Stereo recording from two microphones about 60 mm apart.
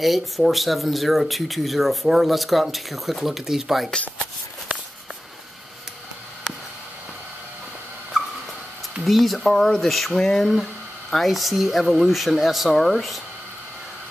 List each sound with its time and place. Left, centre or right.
0.0 s speech: centre
9.0 s speech: centre